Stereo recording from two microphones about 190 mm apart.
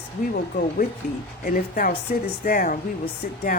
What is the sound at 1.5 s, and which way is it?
Speech, 45° left (ahead or behind).